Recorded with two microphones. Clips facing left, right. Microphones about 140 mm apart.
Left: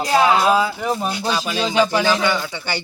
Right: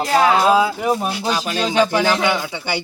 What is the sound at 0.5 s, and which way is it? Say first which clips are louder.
Speech: right 3 dB; 10° right (ahead or behind).